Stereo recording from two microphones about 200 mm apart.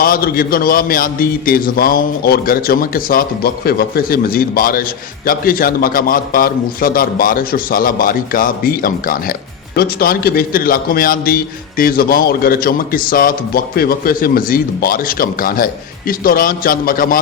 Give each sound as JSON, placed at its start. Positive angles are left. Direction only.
{"t": 0.0, "sound": "a man's voice", "side_deg": 45}